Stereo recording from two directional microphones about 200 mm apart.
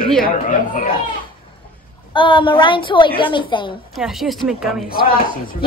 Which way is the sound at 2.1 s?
25° left (ahead or behind).